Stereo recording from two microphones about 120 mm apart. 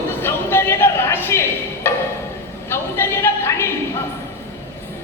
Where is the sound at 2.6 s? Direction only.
20° left (ahead or behind).